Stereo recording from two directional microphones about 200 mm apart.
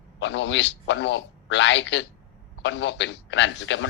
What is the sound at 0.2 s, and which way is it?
A man's voice, 65° left (ahead or behind).